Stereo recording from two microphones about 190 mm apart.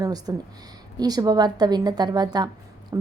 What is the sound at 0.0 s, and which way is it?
A woman's voice, 20° right (ahead or behind).